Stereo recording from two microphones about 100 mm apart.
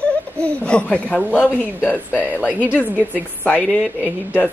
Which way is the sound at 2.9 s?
15° left (ahead or behind).